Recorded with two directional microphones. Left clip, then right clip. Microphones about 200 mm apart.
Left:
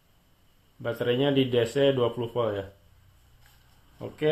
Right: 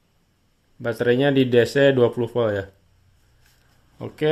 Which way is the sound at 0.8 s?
50° right (ahead or behind).